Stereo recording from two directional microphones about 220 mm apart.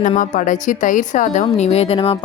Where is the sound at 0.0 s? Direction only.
35° left (ahead or behind).